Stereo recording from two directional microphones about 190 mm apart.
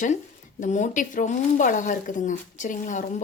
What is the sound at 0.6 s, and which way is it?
Speech, 40° left (ahead or behind).